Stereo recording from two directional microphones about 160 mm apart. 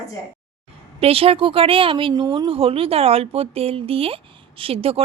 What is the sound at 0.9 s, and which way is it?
A woman's voice, 35° right (ahead or behind).